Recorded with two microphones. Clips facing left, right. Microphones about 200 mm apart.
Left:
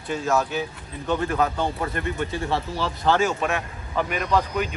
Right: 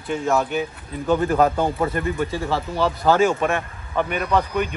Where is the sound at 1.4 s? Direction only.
45° right (ahead or behind).